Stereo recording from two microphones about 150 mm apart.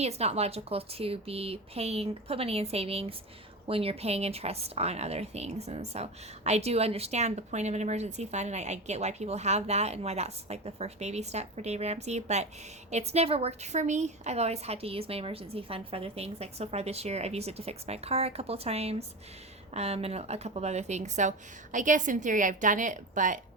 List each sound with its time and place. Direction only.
0.0 s speech: 45° right (ahead or behind)